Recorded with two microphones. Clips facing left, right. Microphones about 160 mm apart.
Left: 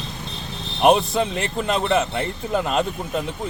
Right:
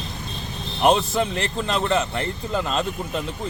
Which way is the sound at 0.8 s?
20° left (ahead or behind).